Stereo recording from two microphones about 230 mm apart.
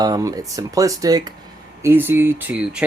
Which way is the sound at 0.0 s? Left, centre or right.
Centre.